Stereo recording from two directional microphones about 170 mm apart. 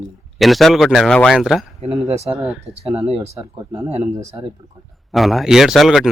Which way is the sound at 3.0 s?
35° right (ahead or behind).